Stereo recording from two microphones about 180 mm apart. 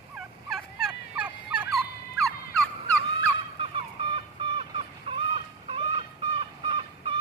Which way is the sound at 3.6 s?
30° right (ahead or behind).